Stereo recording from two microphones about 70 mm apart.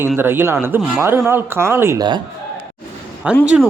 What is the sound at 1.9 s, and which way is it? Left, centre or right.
Speech, right.